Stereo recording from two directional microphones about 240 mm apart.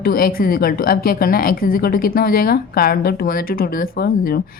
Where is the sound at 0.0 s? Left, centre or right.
Left.